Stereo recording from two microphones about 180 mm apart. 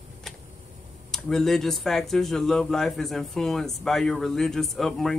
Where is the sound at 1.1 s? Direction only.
Centre (ahead or behind).